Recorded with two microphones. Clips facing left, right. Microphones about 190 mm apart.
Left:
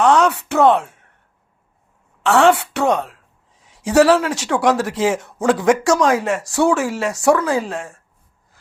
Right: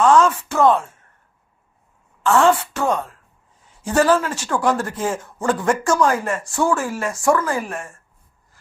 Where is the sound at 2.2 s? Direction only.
70° left (ahead or behind).